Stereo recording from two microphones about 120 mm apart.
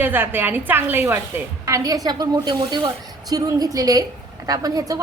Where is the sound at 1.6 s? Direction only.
30° right (ahead or behind).